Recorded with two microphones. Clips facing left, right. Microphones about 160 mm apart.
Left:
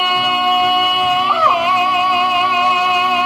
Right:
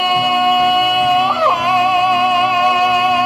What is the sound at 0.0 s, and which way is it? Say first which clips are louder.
Music: right 3 dB; 45° right (ahead or behind).